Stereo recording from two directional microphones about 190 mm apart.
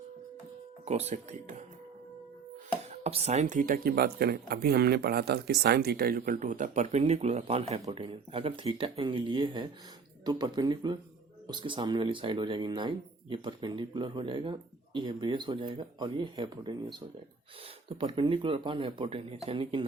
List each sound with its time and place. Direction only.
0.9 s speech: 35° right (ahead or behind)
2.9 s speech: 35° right (ahead or behind)
17.8 s speech: 30° right (ahead or behind)